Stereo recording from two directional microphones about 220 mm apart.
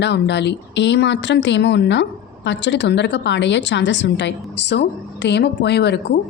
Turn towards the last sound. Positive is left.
turn(degrees=50)  # may be behind; listen again after turning